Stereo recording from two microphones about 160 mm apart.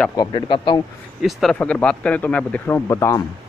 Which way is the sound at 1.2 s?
Centre (ahead or behind).